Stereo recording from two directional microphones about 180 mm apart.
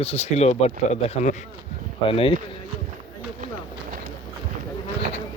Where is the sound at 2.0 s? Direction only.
30° left (ahead or behind).